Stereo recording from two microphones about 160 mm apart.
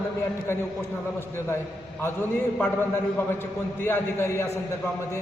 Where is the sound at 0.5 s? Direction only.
15° left (ahead or behind).